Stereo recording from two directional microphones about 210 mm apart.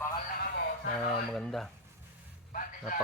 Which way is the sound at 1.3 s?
5° left (ahead or behind).